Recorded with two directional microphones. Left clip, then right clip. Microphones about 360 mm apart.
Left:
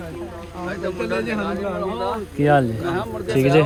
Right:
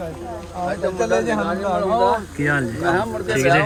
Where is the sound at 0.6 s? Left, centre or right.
Right.